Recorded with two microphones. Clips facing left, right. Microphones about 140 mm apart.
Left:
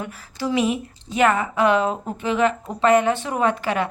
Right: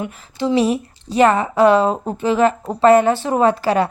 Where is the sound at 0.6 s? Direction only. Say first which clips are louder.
Right 4 dB; 35° right (ahead or behind).